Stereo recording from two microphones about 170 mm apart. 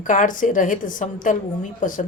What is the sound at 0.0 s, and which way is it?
Speech, 50° left (ahead or behind).